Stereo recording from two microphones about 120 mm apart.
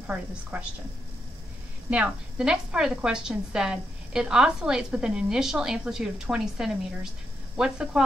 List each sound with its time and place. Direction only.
0.0 s a woman's voice: 10° right (ahead or behind)
1.9 s a woman's voice: 10° right (ahead or behind)